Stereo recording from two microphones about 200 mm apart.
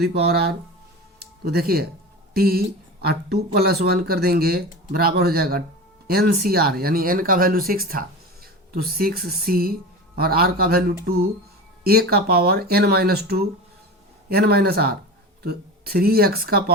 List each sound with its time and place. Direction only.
0.0 s speech: 55° right (ahead or behind)